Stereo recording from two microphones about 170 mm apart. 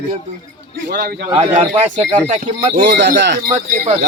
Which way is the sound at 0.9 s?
65° right (ahead or behind).